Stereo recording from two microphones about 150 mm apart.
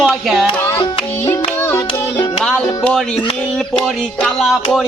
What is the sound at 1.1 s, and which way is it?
Speech, 15° left (ahead or behind).